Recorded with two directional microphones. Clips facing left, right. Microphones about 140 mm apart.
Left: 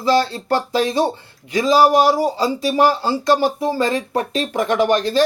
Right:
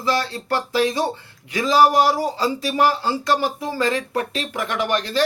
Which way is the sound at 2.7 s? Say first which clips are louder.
Left 3 dB; 35° left (ahead or behind).